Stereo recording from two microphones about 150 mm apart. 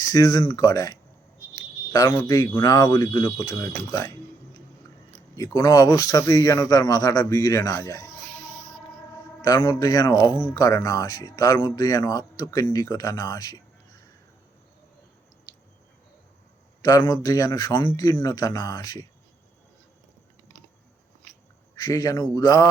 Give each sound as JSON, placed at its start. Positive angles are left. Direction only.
{"t": 0.0, "sound": "speech", "side_deg": 25}
{"t": 1.5, "sound": "a sound", "side_deg": 25}
{"t": 2.6, "sound": "speech", "side_deg": 25}
{"t": 5.4, "sound": "speech", "side_deg": 25}
{"t": 9.1, "sound": "speech", "side_deg": 25}
{"t": 16.8, "sound": "speech", "side_deg": 25}
{"t": 21.8, "sound": "speech", "side_deg": 25}